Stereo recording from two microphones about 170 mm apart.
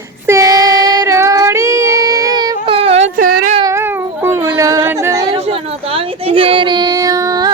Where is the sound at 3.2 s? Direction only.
50° right (ahead or behind).